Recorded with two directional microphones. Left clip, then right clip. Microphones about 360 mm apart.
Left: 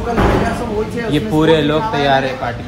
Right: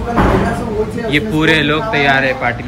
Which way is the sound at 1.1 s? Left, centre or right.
Centre.